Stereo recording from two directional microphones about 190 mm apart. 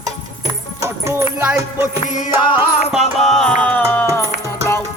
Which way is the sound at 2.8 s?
35° left (ahead or behind).